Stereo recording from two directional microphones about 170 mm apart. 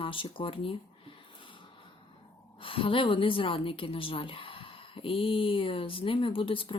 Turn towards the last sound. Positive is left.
turn(degrees=30)  # may be behind; listen again after turning